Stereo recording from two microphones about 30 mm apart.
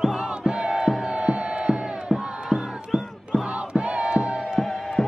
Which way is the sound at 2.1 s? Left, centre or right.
Left.